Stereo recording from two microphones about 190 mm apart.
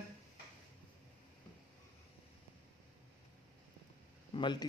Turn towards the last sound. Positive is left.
turn(degrees=25)  # may be behind; listen again after turning